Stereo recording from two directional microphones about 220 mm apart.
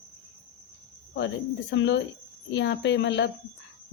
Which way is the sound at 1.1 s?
55° left (ahead or behind).